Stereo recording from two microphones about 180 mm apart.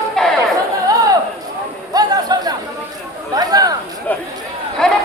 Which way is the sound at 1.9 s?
20° right (ahead or behind).